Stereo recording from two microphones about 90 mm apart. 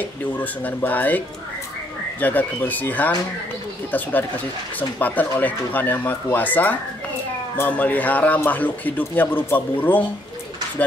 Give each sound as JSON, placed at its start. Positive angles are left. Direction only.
{"t": 0.0, "sound": "speech", "side_deg": 20}